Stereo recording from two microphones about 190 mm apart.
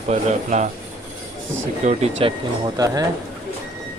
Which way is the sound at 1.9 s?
35° right (ahead or behind).